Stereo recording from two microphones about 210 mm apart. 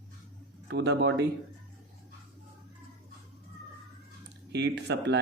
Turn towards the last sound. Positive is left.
turn(degrees=-55)  # may be behind; listen again after turning